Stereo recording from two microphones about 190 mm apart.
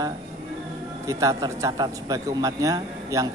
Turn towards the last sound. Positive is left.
turn(degrees=-20)  # may be behind; listen again after turning